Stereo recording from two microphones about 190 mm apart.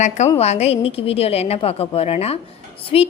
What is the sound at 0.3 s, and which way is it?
A woman's voice, 35° left (ahead or behind).